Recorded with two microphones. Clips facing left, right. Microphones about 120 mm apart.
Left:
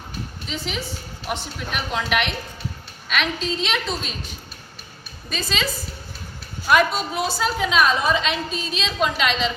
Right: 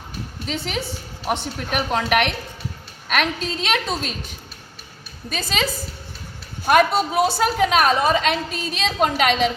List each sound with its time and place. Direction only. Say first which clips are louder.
0.4 s a woman's voice: right 4 dB; 55° right (ahead or behind)
5.3 s a woman's voice: right 2 dB; 50° right (ahead or behind)
6.7 s a woman's voice: right 3 dB; 50° right (ahead or behind)